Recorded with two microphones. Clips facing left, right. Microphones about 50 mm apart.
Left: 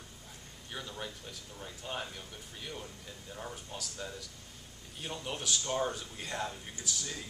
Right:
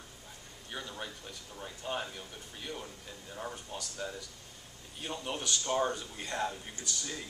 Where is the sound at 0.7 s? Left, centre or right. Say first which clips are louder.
Right 1 dB; centre.